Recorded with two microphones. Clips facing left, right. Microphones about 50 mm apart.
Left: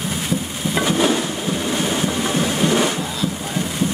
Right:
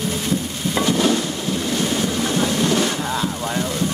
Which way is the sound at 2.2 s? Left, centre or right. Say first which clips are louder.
Even; centre.